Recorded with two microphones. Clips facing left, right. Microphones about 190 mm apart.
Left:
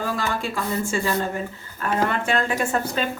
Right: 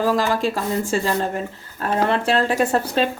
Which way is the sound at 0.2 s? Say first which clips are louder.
Right 5 dB; 35° right (ahead or behind).